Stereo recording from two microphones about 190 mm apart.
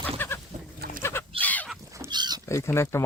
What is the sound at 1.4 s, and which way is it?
Fowl, 10° left (ahead or behind).